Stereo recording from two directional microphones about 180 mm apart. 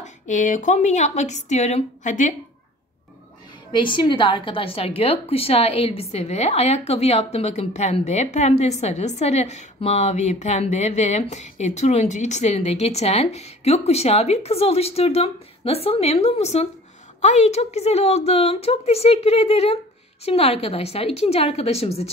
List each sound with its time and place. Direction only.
0.0 s a woman's voice: 45° left (ahead or behind)
3.7 s a woman's voice: 25° left (ahead or behind)